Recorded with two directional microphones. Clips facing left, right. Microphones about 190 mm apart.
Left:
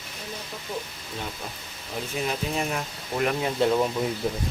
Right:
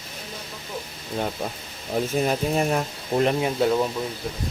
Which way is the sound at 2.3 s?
40° right (ahead or behind).